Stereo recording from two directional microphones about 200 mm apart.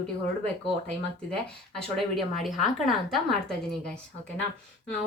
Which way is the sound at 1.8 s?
Centre (ahead or behind).